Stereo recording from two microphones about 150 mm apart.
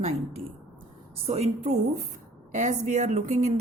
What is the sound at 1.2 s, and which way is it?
A woman's voice, 45° right (ahead or behind).